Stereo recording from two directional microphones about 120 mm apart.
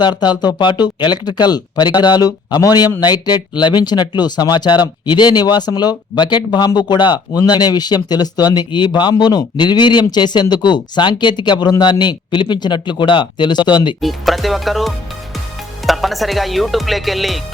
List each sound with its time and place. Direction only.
0.0 s speech: 35° left (ahead or behind)
14.0 s speech: centre (ahead or behind)